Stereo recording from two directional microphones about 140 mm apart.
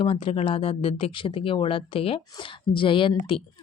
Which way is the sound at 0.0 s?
40° left (ahead or behind).